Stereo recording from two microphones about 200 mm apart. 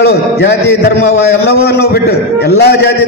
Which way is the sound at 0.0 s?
55° left (ahead or behind).